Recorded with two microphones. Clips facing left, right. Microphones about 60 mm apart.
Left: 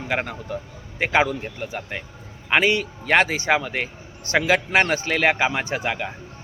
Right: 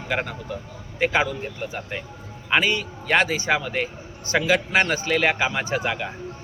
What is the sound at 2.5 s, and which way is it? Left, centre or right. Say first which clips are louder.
Speech: left 2 dB; left.